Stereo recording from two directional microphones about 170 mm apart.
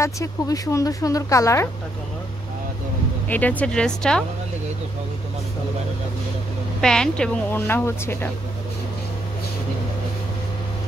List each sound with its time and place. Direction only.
0.0 s speech: 20° left (ahead or behind)
3.3 s speech: 10° left (ahead or behind)
6.8 s speech: 5° left (ahead or behind)